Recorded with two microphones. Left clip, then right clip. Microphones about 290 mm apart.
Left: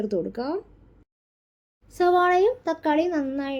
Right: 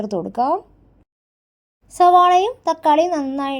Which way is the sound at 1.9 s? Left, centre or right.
Right.